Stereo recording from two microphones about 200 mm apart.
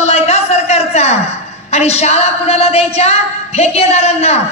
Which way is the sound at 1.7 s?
30° left (ahead or behind).